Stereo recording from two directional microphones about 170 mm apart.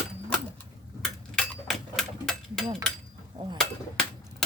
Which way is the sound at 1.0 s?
Centre (ahead or behind).